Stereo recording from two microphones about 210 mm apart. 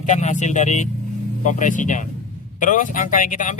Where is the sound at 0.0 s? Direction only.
35° left (ahead or behind).